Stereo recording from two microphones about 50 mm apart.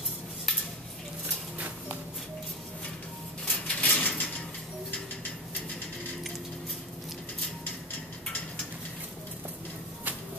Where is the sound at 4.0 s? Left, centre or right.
Left.